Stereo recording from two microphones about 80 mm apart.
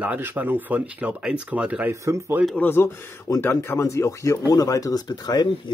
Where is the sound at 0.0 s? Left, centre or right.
Centre.